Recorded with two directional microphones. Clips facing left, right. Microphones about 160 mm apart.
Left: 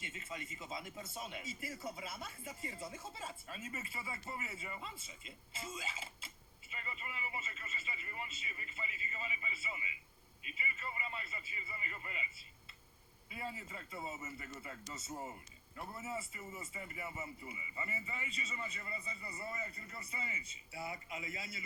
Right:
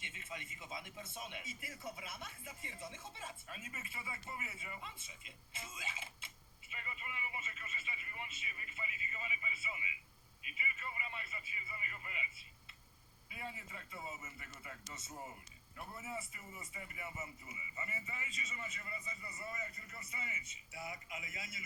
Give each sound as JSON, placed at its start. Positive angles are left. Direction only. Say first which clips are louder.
{"t": 0.0, "sound": "speech", "louder": "left 3 dB", "side_deg": 30}
{"t": 13.3, "sound": "speech", "louder": "left 3 dB", "side_deg": 35}